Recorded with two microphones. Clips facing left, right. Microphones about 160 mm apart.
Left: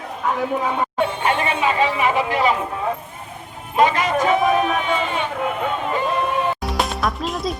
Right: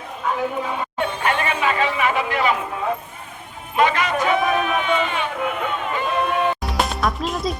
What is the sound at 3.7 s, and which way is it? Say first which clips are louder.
Music: left 2 dB; 30° left (ahead or behind).